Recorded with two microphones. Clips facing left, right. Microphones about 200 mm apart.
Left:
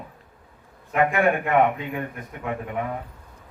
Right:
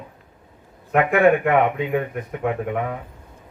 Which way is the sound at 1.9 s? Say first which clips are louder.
Right 8 dB; 60° right (ahead or behind).